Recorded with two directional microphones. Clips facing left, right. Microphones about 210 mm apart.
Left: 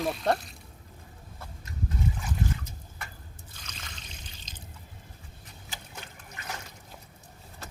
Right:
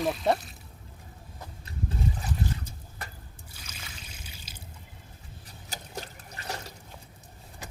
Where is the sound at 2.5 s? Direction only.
35° right (ahead or behind).